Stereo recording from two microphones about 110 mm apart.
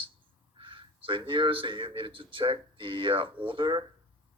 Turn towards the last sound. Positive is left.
turn(degrees=-45)  # may be behind; listen again after turning